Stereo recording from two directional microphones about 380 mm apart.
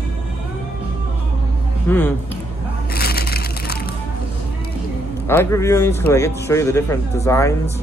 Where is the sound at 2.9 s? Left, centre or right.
Left.